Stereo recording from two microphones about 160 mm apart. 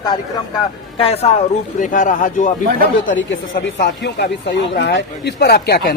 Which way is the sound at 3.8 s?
90° left.